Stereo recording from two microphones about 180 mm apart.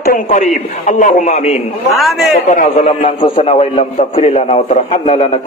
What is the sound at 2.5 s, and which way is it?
Speech, 40° left (ahead or behind).